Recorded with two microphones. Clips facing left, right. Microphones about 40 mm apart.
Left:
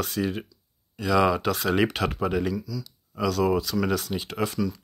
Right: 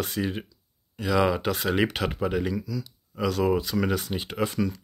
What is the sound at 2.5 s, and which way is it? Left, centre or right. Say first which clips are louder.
Speech: right 1 dB; right.